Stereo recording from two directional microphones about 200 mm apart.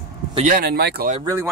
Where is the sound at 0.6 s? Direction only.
55° right (ahead or behind).